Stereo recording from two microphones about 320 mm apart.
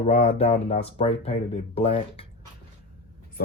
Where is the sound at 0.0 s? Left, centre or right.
Centre.